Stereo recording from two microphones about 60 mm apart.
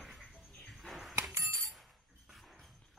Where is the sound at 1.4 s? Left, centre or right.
Right.